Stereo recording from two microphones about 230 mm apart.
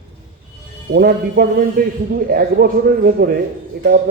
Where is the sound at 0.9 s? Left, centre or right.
Right.